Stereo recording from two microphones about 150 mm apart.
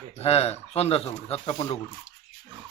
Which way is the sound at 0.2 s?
45° left (ahead or behind).